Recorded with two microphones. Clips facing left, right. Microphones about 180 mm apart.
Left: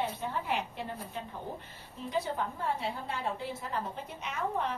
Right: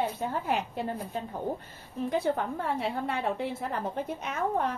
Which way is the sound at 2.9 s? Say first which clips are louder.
Right 5 dB; 60° right (ahead or behind).